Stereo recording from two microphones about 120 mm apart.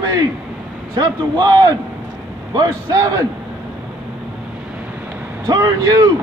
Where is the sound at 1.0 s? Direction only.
35° right (ahead or behind).